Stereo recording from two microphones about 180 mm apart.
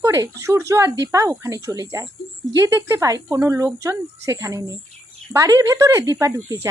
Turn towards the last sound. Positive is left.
turn(degrees=-15)  # may be behind; listen again after turning